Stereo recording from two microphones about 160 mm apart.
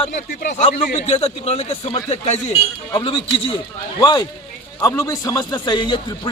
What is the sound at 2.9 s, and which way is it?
A man's voice, 30° left (ahead or behind).